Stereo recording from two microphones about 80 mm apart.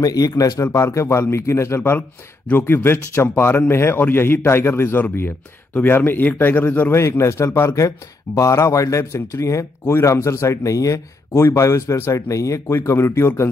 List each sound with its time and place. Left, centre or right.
0.0 s speech: left
1.8 s speech: left